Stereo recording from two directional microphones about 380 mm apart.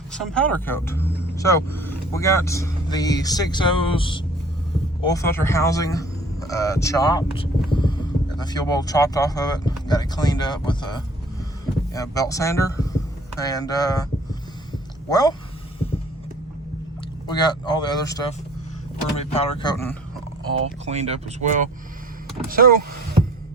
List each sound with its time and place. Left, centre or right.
0.1 s speech: centre
15.1 s speech: centre
17.2 s speech: centre
20.8 s speech: centre